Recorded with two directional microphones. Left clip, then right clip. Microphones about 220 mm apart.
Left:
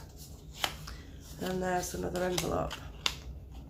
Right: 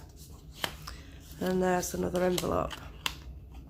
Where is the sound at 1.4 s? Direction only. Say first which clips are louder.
Right 4 dB; 45° right (ahead or behind).